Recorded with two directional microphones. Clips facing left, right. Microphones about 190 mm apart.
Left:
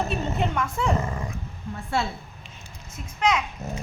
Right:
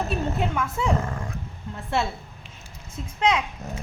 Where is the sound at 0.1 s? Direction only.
5° right (ahead or behind).